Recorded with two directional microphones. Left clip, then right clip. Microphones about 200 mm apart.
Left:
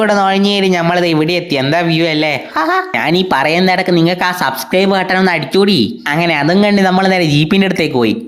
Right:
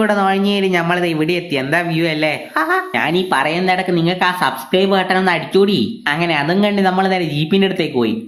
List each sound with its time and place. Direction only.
0.0 s speech: 25° left (ahead or behind)
3.1 s speech: 40° left (ahead or behind)